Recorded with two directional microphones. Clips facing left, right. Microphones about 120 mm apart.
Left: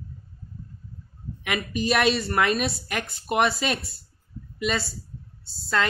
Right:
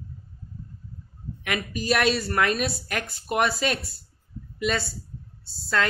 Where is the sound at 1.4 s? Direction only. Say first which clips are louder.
Left 2 dB; centre (ahead or behind).